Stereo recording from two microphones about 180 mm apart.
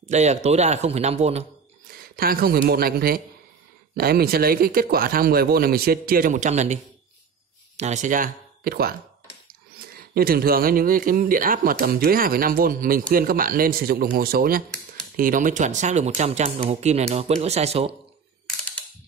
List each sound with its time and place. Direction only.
0.1 s speech: 40° right (ahead or behind)
2.1 s speech: 55° right (ahead or behind); by 17.9 s 35° right (ahead or behind)